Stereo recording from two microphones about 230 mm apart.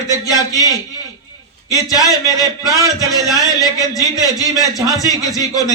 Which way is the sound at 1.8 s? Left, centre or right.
Centre.